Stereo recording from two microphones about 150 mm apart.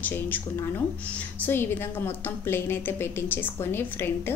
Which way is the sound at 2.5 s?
15° left (ahead or behind).